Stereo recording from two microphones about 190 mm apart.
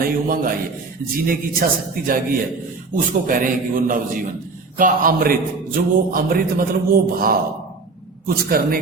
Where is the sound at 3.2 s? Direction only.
45° right (ahead or behind).